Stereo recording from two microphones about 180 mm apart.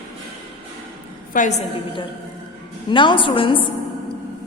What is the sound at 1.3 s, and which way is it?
Speech, 50° left (ahead or behind).